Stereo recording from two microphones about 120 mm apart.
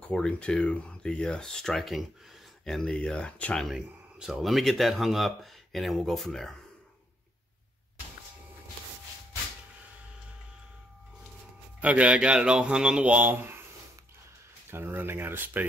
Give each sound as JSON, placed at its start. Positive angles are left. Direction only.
{"t": 0.1, "sound": "speech", "side_deg": 10}
{"t": 3.6, "sound": "speech", "side_deg": -5}
{"t": 11.8, "sound": "speech", "side_deg": -10}
{"t": 14.7, "sound": "speech", "side_deg": -20}